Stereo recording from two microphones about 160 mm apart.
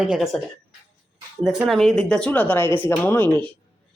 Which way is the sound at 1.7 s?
Centre (ahead or behind).